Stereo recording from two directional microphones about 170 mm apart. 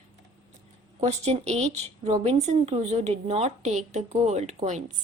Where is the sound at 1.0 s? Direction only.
40° right (ahead or behind).